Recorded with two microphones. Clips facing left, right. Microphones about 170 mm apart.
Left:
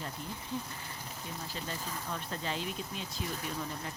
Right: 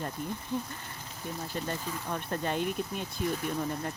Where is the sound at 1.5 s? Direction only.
55° right (ahead or behind).